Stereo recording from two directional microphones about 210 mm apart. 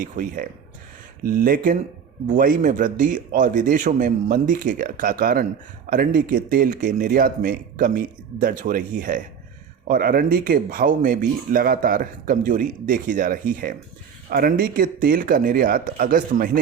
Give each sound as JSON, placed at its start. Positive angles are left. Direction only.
{"t": 0.0, "sound": "speech", "side_deg": -40}